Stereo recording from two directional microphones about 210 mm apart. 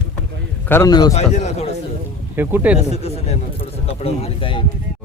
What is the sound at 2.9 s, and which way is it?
Speech, 30° left (ahead or behind).